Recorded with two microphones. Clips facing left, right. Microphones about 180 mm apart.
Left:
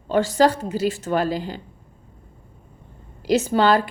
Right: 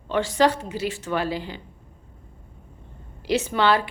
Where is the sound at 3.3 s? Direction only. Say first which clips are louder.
Left 3 dB; 40° left (ahead or behind).